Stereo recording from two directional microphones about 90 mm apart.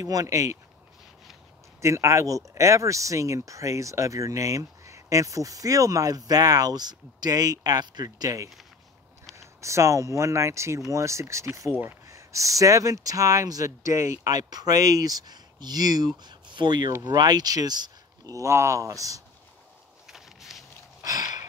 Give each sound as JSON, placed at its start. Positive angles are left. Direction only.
{"t": 0.0, "sound": "speech", "side_deg": -40}
{"t": 1.8, "sound": "speech", "side_deg": -35}
{"t": 11.7, "sound": "speech", "side_deg": -20}
{"t": 12.1, "sound": "speech", "side_deg": -35}
{"t": 20.1, "sound": "walk", "side_deg": -5}
{"t": 21.0, "sound": "a sound", "side_deg": -45}